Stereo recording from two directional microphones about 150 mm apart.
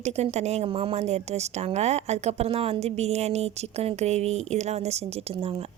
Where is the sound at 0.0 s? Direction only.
45° right (ahead or behind).